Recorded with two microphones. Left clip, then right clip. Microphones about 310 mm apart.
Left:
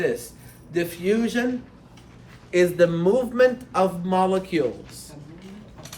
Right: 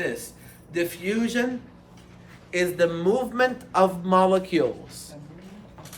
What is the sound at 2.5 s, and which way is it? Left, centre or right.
Speech, centre.